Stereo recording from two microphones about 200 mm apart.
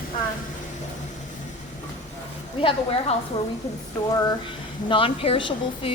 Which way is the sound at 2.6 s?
25° left (ahead or behind).